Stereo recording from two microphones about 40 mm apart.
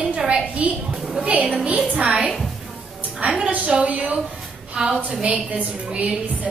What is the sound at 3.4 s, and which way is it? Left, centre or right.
Speech, right.